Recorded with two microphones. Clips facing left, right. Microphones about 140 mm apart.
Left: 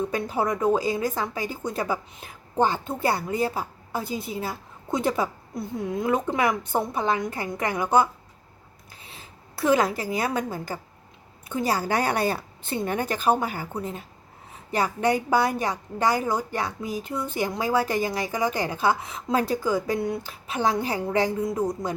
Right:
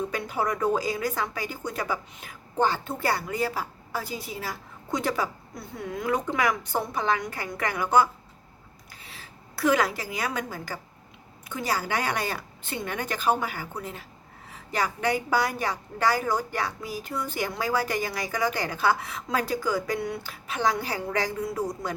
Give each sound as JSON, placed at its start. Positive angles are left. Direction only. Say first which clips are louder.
{"t": 0.1, "sound": "a woman's voice", "louder": "left 3 dB", "side_deg": 25}
{"t": 9.6, "sound": "a woman's voice", "louder": "left 2 dB", "side_deg": 25}